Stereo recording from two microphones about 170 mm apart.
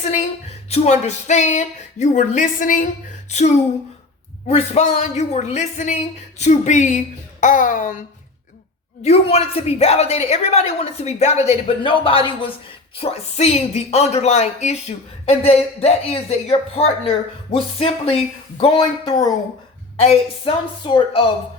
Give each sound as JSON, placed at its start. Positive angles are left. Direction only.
{"t": 0.0, "sound": "speech", "side_deg": 45}
{"t": 9.0, "sound": "speech", "side_deg": 35}